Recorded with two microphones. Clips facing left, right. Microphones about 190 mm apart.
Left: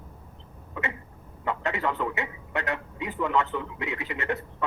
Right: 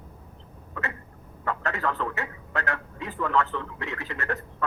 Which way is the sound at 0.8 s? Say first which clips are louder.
Left 1 dB; 20° left (ahead or behind).